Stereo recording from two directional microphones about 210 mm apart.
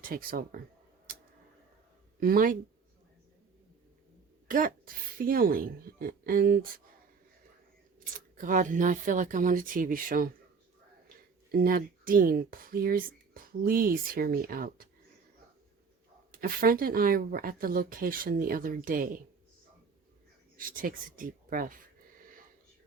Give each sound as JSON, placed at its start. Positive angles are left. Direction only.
{"t": 0.1, "sound": "speech", "side_deg": -45}
{"t": 1.1, "sound": "tick-tock", "side_deg": -40}
{"t": 2.2, "sound": "speech", "side_deg": -40}
{"t": 4.4, "sound": "speech", "side_deg": -40}
{"t": 7.9, "sound": "speech", "side_deg": -40}
{"t": 11.5, "sound": "speech", "side_deg": -45}
{"t": 16.3, "sound": "speech", "side_deg": -45}
{"t": 20.6, "sound": "speech", "side_deg": -40}